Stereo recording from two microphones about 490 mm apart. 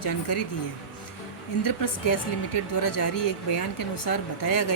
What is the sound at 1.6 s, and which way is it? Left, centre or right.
Speech, left.